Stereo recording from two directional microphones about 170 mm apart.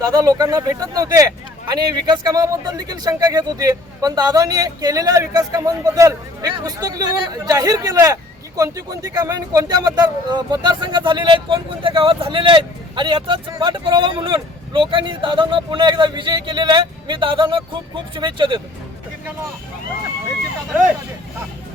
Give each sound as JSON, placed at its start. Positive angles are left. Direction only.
{"t": 0.0, "sound": "speech", "side_deg": -20}